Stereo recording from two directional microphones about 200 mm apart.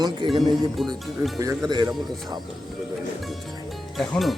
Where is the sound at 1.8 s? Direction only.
Centre (ahead or behind).